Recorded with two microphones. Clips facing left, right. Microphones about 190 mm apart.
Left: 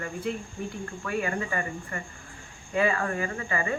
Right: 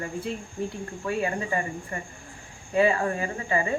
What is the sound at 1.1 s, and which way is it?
Speech, 25° right (ahead or behind).